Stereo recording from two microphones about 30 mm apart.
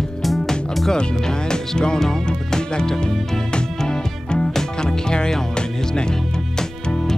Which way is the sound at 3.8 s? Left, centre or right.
Left.